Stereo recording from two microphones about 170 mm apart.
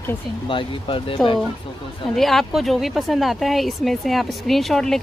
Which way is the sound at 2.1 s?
Centre (ahead or behind).